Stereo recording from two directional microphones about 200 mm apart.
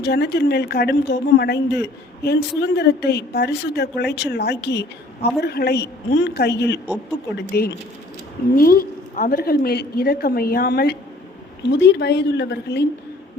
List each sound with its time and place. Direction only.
0.0 s a woman's voice: 55° left (ahead or behind)